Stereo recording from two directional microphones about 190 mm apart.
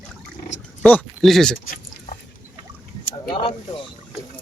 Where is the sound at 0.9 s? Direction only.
5° left (ahead or behind).